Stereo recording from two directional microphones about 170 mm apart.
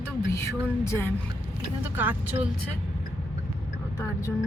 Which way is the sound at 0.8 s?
15° left (ahead or behind).